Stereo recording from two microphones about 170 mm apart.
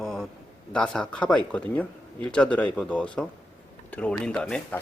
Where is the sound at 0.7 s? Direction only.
5° left (ahead or behind).